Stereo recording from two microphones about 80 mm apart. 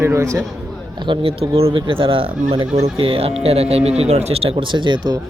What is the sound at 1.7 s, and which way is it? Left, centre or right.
Speech, right.